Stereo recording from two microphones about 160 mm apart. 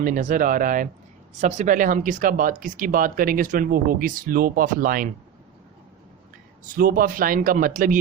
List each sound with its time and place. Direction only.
0.0 s speech: 55° right (ahead or behind)
6.7 s speech: 60° right (ahead or behind)